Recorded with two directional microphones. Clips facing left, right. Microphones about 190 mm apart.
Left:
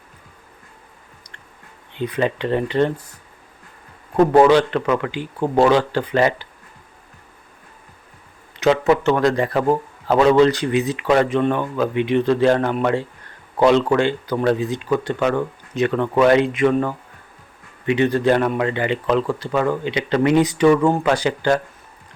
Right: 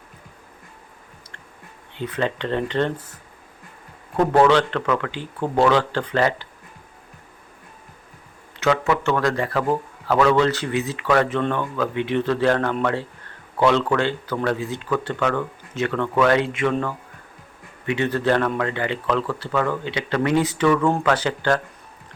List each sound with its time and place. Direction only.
1.9 s a man's voice: 15° left (ahead or behind)
4.3 s a man's voice: 15° left (ahead or behind)
8.6 s a man's voice: 20° left (ahead or behind)